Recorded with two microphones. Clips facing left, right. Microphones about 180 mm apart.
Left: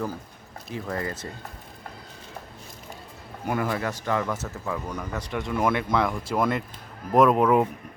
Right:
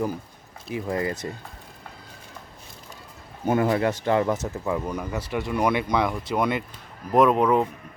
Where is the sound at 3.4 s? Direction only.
25° right (ahead or behind).